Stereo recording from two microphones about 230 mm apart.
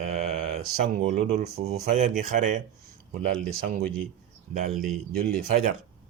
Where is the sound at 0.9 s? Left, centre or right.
Right.